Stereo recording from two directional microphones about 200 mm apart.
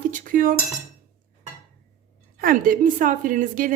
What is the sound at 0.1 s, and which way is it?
Cutlery, 45° right (ahead or behind).